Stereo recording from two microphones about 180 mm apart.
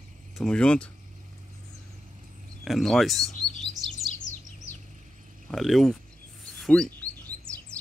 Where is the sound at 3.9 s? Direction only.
40° left (ahead or behind).